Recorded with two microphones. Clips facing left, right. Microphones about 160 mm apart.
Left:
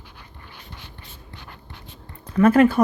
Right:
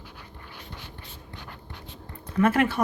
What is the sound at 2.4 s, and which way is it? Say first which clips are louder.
Speech: left 8 dB; 35° left (ahead or behind).